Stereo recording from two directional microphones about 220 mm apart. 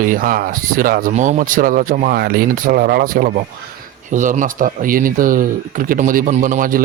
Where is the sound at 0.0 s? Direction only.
40° right (ahead or behind).